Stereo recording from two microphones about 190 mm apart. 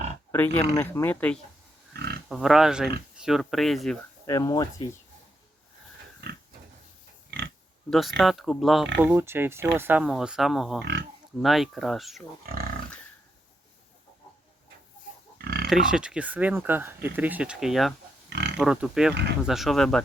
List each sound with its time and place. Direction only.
0.3 s speech: 10° left (ahead or behind)
1.9 s pig: 60° right (ahead or behind)
2.3 s speech: centre (ahead or behind)
4.3 s speech: 15° left (ahead or behind)
7.9 s speech: centre (ahead or behind)
9.0 s speech: 10° right (ahead or behind)
12.4 s speech: 50° right (ahead or behind)
15.4 s pig: 55° right (ahead or behind)
15.6 s speech: 5° right (ahead or behind)
18.3 s pig: 65° right (ahead or behind)
18.5 s speech: 5° right (ahead or behind)